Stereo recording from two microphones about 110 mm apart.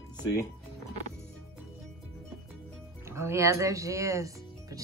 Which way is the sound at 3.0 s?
25° right (ahead or behind).